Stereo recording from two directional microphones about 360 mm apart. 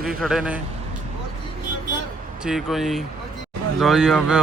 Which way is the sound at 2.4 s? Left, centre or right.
Centre.